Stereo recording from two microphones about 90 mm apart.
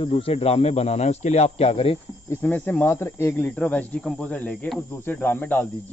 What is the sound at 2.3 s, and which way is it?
Speech, 20° left (ahead or behind).